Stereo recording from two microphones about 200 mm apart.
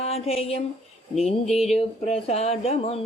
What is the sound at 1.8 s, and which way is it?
Speech, 30° left (ahead or behind).